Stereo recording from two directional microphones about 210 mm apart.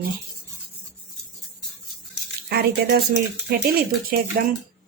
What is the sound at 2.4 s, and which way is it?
Speech, 50° right (ahead or behind).